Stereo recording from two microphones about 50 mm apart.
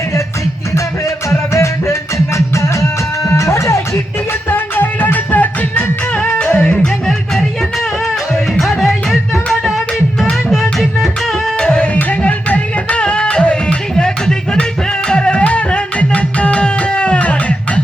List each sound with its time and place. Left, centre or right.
1.3 s music: left
4.4 s music: left
6.7 s music: centre
8.5 s music: centre
11.5 s music: centre
12.2 s music: left